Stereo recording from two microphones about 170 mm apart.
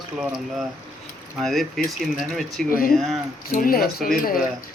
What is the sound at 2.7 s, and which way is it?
Speech, 55° left (ahead or behind).